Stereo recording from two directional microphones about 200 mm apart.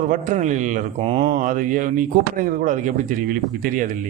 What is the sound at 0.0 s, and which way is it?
A man's voice, 40° right (ahead or behind).